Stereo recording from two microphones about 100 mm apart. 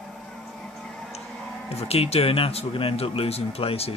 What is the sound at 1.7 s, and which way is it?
Speech, 90° left.